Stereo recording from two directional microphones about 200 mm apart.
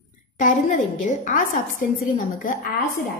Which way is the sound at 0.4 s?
40° left (ahead or behind).